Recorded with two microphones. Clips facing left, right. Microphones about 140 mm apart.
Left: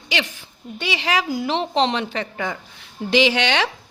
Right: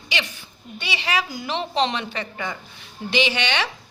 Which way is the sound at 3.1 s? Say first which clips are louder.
Left 5 dB; 90° left.